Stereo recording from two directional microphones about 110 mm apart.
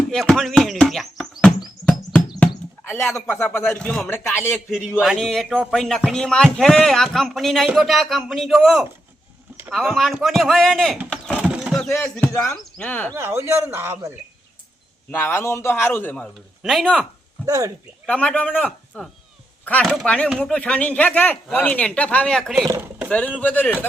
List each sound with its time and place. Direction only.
0.1 s speech: 5° left (ahead or behind)
3.0 s speech: 25° left (ahead or behind)
3.8 s speech: 10° left (ahead or behind)
4.0 s speech: 25° left (ahead or behind)
4.9 s speech: centre (ahead or behind)
11.3 s a sound: 10° right (ahead or behind)
11.9 s speech: 25° left (ahead or behind)
12.7 s speech: 10° left (ahead or behind)
13.1 s speech: 25° right (ahead or behind)
15.1 s speech: 20° left (ahead or behind)
16.6 s speech: centre (ahead or behind)
17.4 s speech: 30° right (ahead or behind)
18.0 s a man's voice: 10° left (ahead or behind)